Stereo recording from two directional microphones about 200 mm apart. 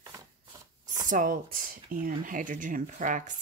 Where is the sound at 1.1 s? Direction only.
45° right (ahead or behind).